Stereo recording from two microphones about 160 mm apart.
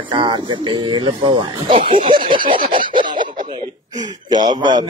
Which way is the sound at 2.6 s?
60° right (ahead or behind).